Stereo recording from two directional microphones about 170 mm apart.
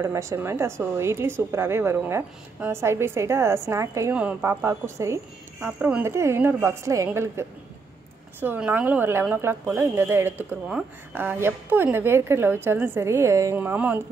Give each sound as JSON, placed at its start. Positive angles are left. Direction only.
{"t": 0.0, "sound": "a woman's voice", "side_deg": -15}